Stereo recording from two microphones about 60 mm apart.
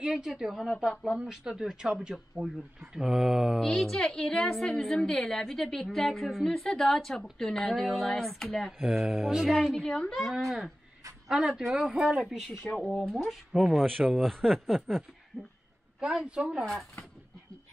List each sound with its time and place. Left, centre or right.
0.0 s speech: centre
3.5 s a woman's voice: centre
8.7 s speech: centre
9.5 s a woman's voice: centre
10.1 s speech: centre
12.9 s a woman's voice: centre
13.3 s speech: centre
13.8 s speech: right
14.2 s speech: centre
16.0 s speech: centre